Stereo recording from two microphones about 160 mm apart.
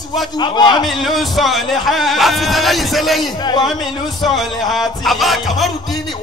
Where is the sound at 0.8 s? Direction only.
Centre (ahead or behind).